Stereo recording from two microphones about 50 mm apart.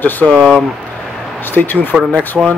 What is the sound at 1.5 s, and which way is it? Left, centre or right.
Speech, left.